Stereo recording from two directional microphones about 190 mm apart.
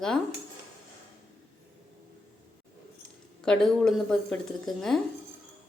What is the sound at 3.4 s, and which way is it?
A woman's voice, 5° left (ahead or behind).